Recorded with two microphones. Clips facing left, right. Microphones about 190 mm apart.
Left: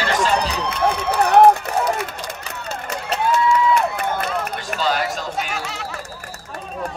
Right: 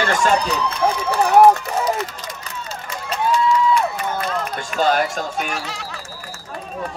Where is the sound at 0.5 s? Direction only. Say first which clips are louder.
Right 1 dB; 65° left (ahead or behind).